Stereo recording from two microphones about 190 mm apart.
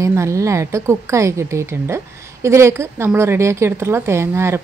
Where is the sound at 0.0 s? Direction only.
15° right (ahead or behind).